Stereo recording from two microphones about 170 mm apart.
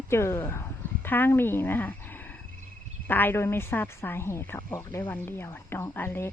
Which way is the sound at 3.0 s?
10° left (ahead or behind).